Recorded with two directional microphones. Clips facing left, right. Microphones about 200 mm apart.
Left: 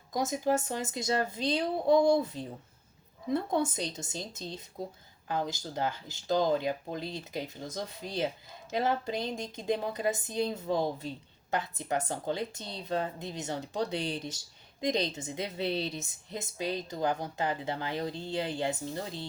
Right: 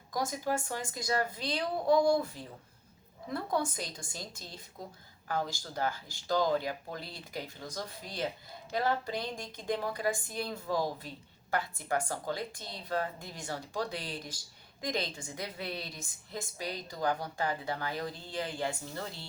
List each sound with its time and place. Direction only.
0.1 s speech: 20° left (ahead or behind)